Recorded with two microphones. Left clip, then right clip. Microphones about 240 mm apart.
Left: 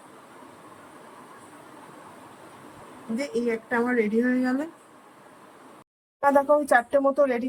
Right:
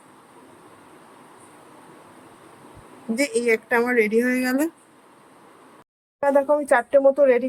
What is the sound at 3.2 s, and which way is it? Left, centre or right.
Speech, right.